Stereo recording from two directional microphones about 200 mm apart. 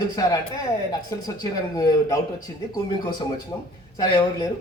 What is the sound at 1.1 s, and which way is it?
A man's voice, 15° left (ahead or behind).